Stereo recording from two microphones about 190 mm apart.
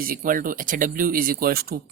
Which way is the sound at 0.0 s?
50° right (ahead or behind).